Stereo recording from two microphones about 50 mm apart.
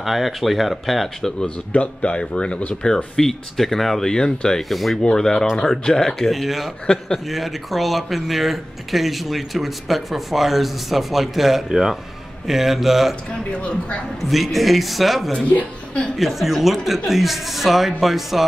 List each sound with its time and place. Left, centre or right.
0.0 s speech: centre
1.7 s speech: left
3.2 s speech: centre
4.6 s speech: centre
5.0 s speech: centre
13.5 s speech: left
14.3 s speech: centre